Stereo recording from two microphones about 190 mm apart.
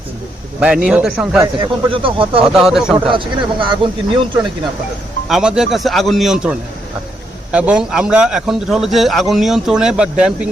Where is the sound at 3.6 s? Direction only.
25° right (ahead or behind).